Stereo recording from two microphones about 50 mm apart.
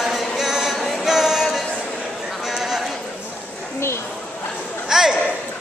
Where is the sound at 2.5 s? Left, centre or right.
Centre.